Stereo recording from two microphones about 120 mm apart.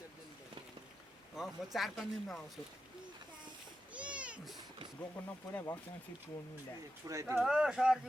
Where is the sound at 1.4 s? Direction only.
Centre (ahead or behind).